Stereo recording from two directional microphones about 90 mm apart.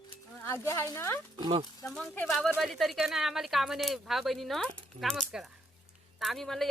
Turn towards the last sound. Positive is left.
turn(degrees=0)  # may be behind; listen again after turning